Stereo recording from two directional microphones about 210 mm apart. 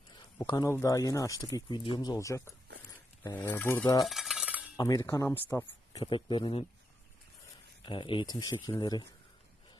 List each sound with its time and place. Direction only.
0.5 s speech: 15° left (ahead or behind)
4.1 s a sound: centre (ahead or behind)
4.7 s speech: 15° left (ahead or behind)
7.8 s speech: 25° left (ahead or behind)